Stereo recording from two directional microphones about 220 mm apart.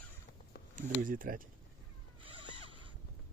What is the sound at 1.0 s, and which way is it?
Speech, 40° right (ahead or behind).